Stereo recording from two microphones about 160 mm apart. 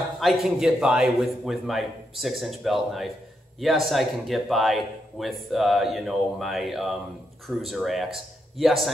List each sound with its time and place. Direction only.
0.2 s a man's voice: centre (ahead or behind)